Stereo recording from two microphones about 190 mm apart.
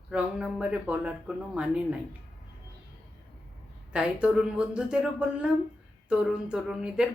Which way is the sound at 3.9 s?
5° right (ahead or behind).